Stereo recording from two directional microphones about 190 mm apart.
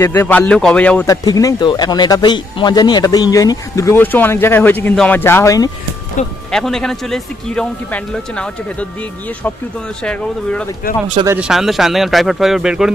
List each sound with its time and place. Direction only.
0.0 s speech: 10° left (ahead or behind)
1.0 s speech: 20° left (ahead or behind)
6.5 s speech: 5° left (ahead or behind)
11.2 s speech: 5° right (ahead or behind)